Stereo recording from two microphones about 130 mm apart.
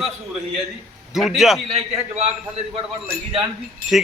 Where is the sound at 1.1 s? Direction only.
Centre (ahead or behind).